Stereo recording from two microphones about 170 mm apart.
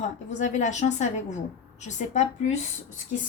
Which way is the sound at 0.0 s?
45° left (ahead or behind).